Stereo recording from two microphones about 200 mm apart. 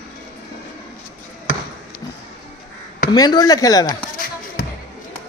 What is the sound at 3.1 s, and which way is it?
Speech, 20° left (ahead or behind).